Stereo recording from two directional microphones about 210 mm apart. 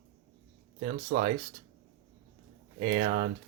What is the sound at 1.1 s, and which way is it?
Speech, 40° right (ahead or behind).